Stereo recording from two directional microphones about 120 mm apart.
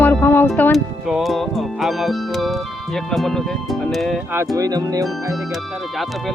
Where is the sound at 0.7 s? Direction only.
Centre (ahead or behind).